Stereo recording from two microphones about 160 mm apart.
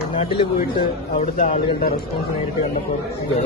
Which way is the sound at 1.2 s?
45° left (ahead or behind).